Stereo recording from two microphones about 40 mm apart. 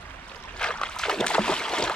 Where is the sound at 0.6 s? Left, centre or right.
Left.